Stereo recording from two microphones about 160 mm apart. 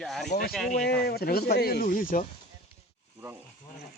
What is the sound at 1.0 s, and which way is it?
Speech, 75° left (ahead or behind).